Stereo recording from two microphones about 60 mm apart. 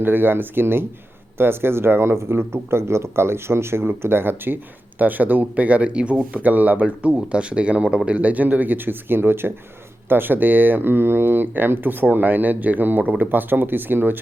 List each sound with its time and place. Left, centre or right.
0.0 s speech: right